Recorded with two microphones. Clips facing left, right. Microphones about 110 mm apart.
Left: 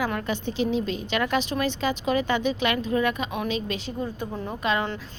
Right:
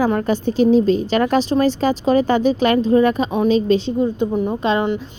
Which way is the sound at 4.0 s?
20° right (ahead or behind).